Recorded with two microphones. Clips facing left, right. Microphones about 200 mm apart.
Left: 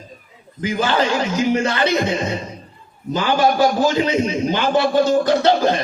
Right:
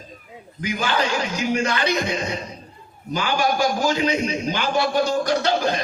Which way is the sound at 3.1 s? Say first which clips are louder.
Left 5 dB; 15° right (ahead or behind).